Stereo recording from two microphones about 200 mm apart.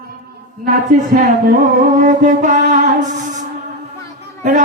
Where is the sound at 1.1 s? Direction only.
45° right (ahead or behind).